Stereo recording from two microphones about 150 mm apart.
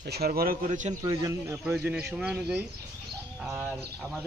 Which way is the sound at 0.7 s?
50° right (ahead or behind).